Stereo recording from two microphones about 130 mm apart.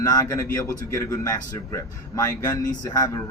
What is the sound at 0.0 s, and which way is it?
A man's voice, 30° left (ahead or behind).